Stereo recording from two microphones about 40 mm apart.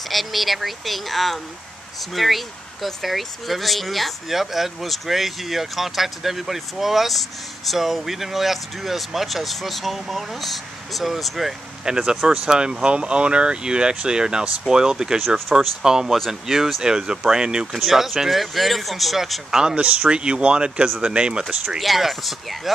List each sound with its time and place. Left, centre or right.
0.1 s speech: centre
11.9 s speech: centre
17.8 s speech: centre
19.5 s speech: centre
21.5 s speech: centre